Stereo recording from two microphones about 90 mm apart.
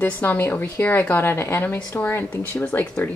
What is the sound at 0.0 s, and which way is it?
A woman's voice, 25° left (ahead or behind).